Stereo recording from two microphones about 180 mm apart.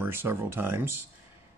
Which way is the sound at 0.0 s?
10° right (ahead or behind).